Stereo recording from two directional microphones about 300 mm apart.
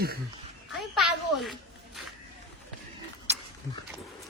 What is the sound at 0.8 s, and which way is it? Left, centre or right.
Speech, centre.